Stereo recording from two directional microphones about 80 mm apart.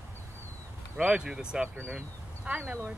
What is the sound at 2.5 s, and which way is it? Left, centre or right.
Speech, centre.